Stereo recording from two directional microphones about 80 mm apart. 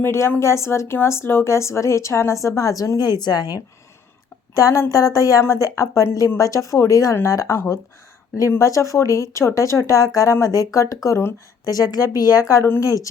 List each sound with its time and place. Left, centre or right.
0.0 s speech: left
3.0 s a woman's voice: left
4.5 s speech: left
11.6 s speech: left